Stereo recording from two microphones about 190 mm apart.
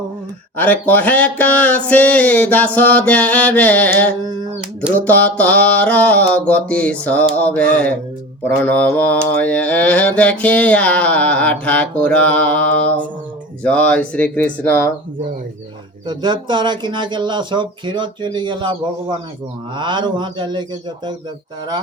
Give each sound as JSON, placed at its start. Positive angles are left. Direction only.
{"t": 0.5, "sound": "mantra", "side_deg": 10}
{"t": 4.2, "sound": "speech", "side_deg": -20}
{"t": 4.9, "sound": "mantra", "side_deg": 10}
{"t": 16.0, "sound": "speech", "side_deg": -25}